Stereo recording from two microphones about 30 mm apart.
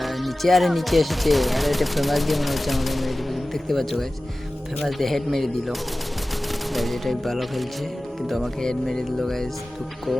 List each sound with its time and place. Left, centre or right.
0.0 s speech: centre
6.7 s speech: centre
8.6 s speech: centre